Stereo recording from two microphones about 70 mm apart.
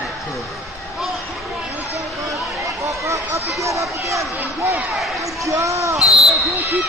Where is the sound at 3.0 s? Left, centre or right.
Right.